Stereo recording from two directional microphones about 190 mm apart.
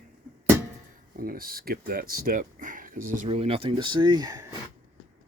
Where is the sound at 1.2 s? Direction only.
50° right (ahead or behind); by 4.5 s 20° right (ahead or behind).